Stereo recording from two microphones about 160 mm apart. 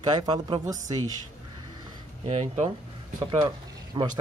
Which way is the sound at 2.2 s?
45° right (ahead or behind).